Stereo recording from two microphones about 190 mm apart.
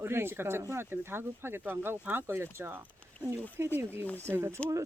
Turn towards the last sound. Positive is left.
turn(degrees=-15)  # may be behind; listen again after turning